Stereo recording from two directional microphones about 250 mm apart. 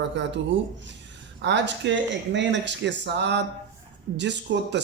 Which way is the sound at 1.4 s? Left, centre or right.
Right.